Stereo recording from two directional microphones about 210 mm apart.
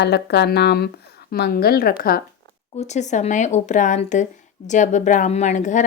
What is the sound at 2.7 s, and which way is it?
Speech, 35° left (ahead or behind).